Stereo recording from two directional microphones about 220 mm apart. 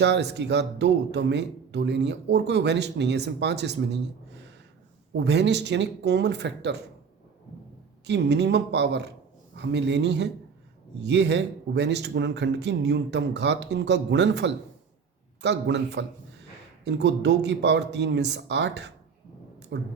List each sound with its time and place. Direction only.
0.0 s speech: 50° right (ahead or behind)
5.1 s speech: 50° right (ahead or behind)
8.0 s speech: 50° right (ahead or behind)